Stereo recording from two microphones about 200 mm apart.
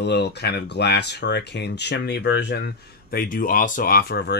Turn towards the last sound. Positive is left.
turn(degrees=55)  # may be behind; listen again after turning